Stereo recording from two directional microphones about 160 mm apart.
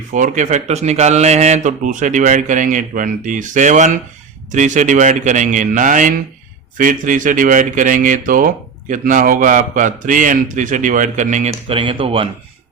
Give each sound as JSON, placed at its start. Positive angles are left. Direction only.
{"t": 0.1, "sound": "speech", "side_deg": -50}